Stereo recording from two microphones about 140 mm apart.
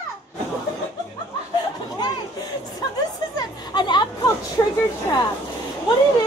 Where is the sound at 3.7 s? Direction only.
35° left (ahead or behind).